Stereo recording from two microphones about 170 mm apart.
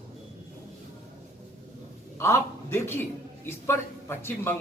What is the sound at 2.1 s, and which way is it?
Speech, 15° left (ahead or behind).